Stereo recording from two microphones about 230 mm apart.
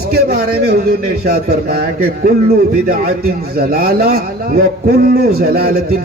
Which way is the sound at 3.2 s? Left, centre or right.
Right.